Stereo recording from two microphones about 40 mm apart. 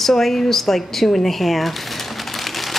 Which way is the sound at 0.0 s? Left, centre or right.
Centre.